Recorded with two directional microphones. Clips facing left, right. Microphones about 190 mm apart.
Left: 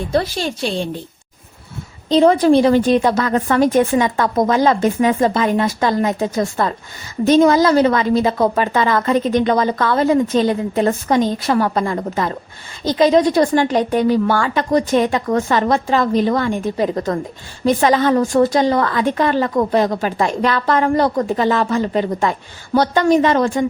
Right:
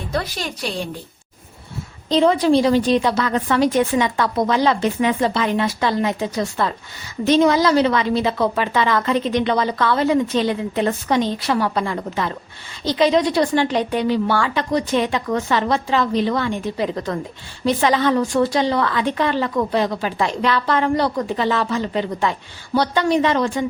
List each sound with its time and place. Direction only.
0.1 s a woman's voice: 30° left (ahead or behind)
2.1 s a woman's voice: 45° left (ahead or behind)